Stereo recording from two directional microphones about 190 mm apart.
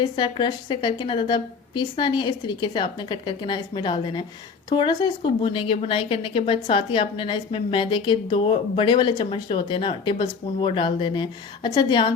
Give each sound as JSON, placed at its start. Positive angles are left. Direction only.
{"t": 0.0, "sound": "speech", "side_deg": 25}